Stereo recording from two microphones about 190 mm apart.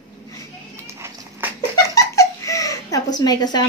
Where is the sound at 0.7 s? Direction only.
15° right (ahead or behind).